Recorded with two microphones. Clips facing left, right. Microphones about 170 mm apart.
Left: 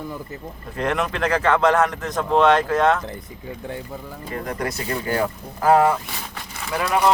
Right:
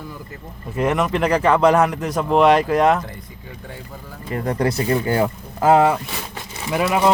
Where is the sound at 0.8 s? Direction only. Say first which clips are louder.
Right 4 dB; 10° right (ahead or behind).